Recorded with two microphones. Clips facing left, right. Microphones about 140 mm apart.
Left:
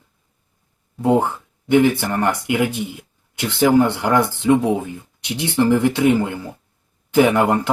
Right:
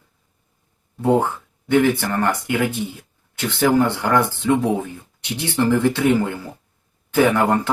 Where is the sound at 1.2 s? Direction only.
15° left (ahead or behind).